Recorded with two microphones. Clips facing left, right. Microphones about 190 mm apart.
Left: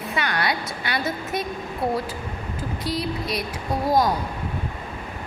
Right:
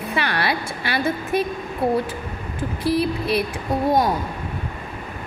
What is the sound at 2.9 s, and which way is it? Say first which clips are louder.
Speech: right 7 dB; 60° right (ahead or behind).